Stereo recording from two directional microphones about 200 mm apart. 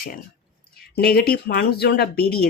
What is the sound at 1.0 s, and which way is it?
Speech, 50° left (ahead or behind).